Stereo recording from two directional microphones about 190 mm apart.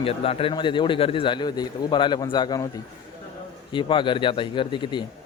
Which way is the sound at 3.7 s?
25° left (ahead or behind).